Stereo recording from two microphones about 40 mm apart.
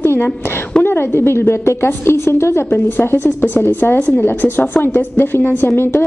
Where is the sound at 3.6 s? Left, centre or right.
Left.